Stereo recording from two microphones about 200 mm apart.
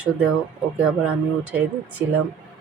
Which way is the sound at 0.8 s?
5° right (ahead or behind).